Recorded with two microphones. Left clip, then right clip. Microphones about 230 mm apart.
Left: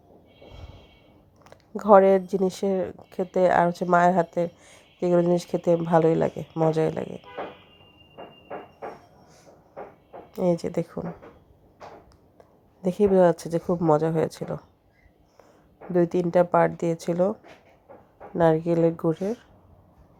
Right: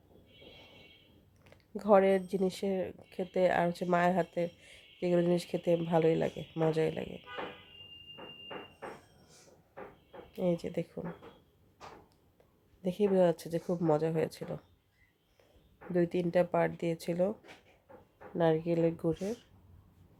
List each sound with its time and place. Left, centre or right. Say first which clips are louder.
1.5 s speech: left 9 dB; centre
10.3 s speech: left 9 dB; centre
12.8 s speech: left 9 dB; centre
15.9 s speech: left 8 dB; centre
18.3 s speech: left 8 dB; centre